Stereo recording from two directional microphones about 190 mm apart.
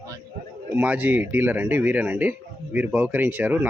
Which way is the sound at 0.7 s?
10° right (ahead or behind).